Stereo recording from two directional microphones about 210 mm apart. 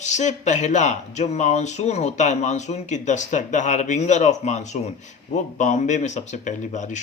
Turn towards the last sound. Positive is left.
turn(degrees=35)  # may be behind; listen again after turning